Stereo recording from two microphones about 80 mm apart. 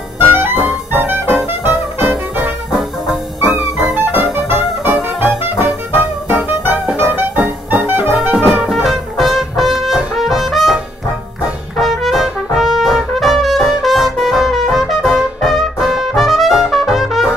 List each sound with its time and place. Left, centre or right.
0.3 s music: right
2.7 s music: centre
3.9 s music: right
8.5 s music: centre
11.7 s trumpet: centre